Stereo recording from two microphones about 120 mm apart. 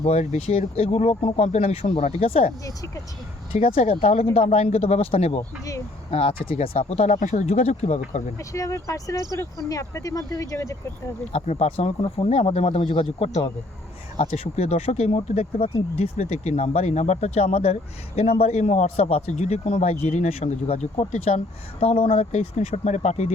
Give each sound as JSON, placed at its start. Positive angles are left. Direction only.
{"t": 0.0, "sound": "speech", "side_deg": 65}
{"t": 2.6, "sound": "speech", "side_deg": 25}
{"t": 3.5, "sound": "a man's voice", "side_deg": 55}
{"t": 8.4, "sound": "speech", "side_deg": 25}
{"t": 11.3, "sound": "speech", "side_deg": 65}
{"t": 16.1, "sound": "a man's voice", "side_deg": 70}